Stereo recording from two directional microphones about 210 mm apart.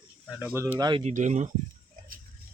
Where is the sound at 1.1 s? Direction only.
35° right (ahead or behind).